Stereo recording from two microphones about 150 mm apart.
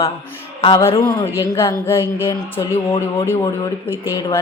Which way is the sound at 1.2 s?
35° left (ahead or behind).